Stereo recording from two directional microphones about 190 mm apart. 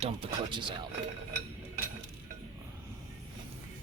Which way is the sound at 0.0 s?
30° right (ahead or behind).